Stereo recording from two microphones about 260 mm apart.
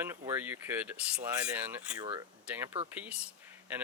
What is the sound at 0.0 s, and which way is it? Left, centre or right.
Speech, centre.